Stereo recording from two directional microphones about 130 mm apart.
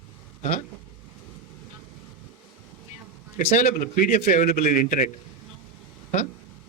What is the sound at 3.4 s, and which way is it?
A man's voice, 65° left (ahead or behind).